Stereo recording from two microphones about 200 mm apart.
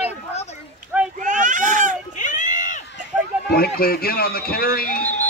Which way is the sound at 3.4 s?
50° left (ahead or behind).